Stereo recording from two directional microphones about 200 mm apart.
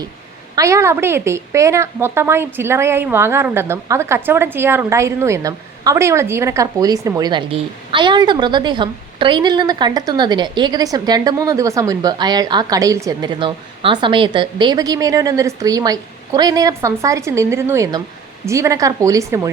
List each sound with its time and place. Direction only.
0.5 s a woman's voice: 15° right (ahead or behind)